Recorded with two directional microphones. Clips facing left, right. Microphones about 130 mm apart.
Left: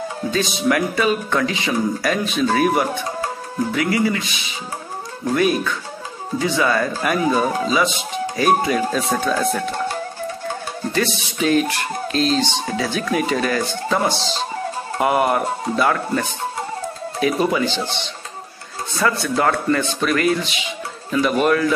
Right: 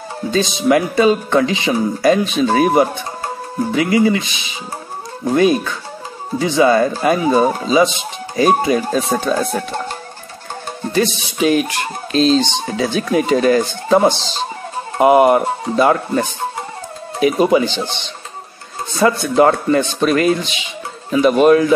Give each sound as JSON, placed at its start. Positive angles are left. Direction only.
{"t": 0.3, "sound": "speech", "side_deg": -25}
{"t": 5.3, "sound": "speech", "side_deg": -25}
{"t": 9.3, "sound": "music", "side_deg": -15}
{"t": 10.9, "sound": "music", "side_deg": -20}
{"t": 12.1, "sound": "speech", "side_deg": -20}
{"t": 18.9, "sound": "speech", "side_deg": -25}